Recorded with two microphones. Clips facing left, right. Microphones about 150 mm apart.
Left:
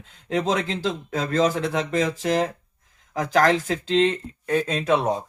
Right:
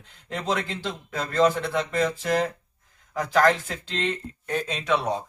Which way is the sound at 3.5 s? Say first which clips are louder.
Left 8 dB; 90° left.